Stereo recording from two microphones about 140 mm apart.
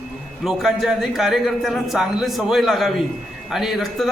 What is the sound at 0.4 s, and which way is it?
A man's voice, centre (ahead or behind).